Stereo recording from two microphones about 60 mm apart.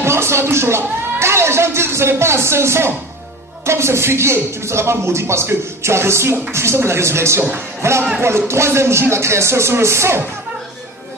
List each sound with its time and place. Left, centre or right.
0.0 s speech: right